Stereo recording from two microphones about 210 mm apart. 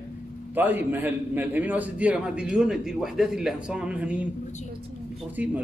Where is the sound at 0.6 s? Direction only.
10° right (ahead or behind).